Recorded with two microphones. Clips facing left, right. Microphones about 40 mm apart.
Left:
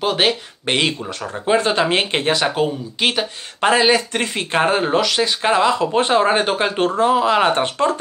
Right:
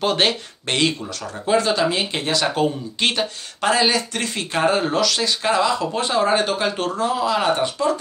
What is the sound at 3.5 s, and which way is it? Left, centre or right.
Speech, left.